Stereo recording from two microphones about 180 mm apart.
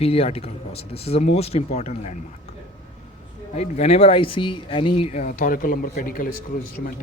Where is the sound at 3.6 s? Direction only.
35° left (ahead or behind).